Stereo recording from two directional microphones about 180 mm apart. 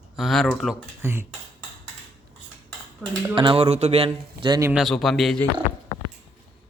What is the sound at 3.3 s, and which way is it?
A man's voice, 30° right (ahead or behind).